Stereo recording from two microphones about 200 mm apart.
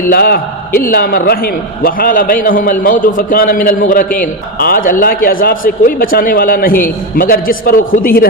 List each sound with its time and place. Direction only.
0.1 s a man's voice: 50° left (ahead or behind)